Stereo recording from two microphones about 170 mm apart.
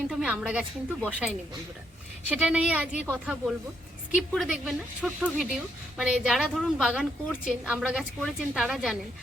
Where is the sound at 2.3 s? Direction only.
5° right (ahead or behind).